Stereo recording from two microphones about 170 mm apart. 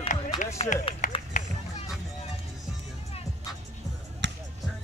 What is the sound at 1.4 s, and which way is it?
Run, 45° left (ahead or behind).